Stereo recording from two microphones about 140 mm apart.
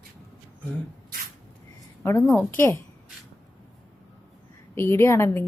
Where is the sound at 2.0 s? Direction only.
15° left (ahead or behind).